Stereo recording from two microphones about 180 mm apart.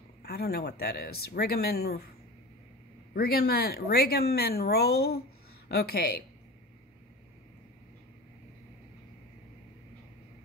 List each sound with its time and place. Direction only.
0.2 s speech: 60° left (ahead or behind)
3.2 s speech: 60° left (ahead or behind)